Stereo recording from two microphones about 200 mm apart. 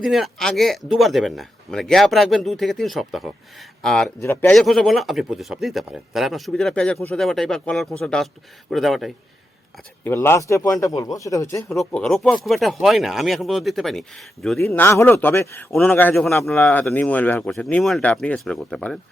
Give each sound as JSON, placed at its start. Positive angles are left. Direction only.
{"t": 0.0, "sound": "a man's voice", "side_deg": 0}
{"t": 10.0, "sound": "a man's voice", "side_deg": 10}
{"t": 11.7, "sound": "a man's voice", "side_deg": 5}
{"t": 14.6, "sound": "a man's voice", "side_deg": 10}